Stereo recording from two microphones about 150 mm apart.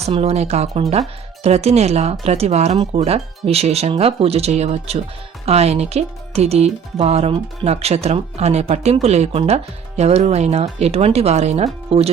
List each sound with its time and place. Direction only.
0.0 s speech: 45° right (ahead or behind)